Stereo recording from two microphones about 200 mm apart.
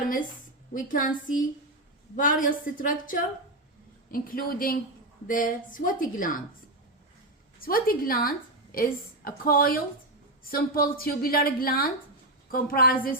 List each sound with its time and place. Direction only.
0.7 s a woman's voice: 40° left (ahead or behind)
7.6 s a woman's voice: 45° left (ahead or behind)